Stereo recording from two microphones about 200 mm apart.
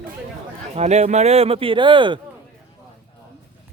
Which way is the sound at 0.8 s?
35° right (ahead or behind).